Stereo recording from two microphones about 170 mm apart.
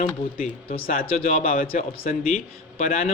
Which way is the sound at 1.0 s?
40° left (ahead or behind).